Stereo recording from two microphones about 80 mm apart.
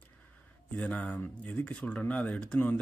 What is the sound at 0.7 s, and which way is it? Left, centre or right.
Speech, centre.